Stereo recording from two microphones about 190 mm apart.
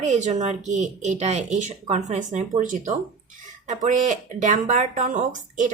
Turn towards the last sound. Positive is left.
turn(degrees=-40)  # may be behind; listen again after turning